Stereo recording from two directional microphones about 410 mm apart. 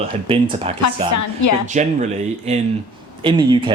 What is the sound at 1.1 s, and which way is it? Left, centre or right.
Speech, left.